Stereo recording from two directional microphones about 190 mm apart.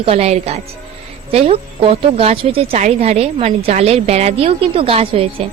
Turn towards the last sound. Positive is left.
turn(degrees=-30)  # may be behind; listen again after turning